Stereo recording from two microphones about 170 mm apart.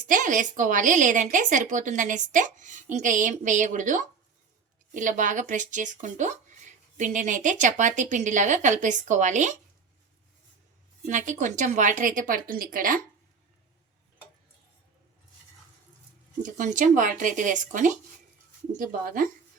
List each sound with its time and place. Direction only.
0.1 s speech: 50° right (ahead or behind)
11.0 s speech: 45° right (ahead or behind)
16.4 s speech: 50° right (ahead or behind)